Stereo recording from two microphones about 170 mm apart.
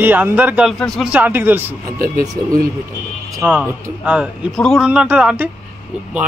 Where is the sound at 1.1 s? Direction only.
10° right (ahead or behind).